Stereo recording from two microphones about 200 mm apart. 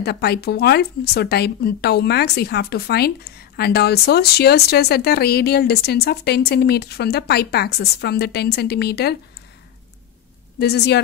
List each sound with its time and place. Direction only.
0.0 s speech: 55° left (ahead or behind)
10.6 s a woman's voice: 55° left (ahead or behind)